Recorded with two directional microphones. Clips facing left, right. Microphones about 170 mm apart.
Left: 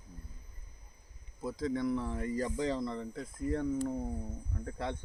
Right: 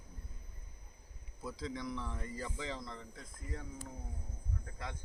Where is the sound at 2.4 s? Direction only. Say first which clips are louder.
Left 9 dB; 40° left (ahead or behind).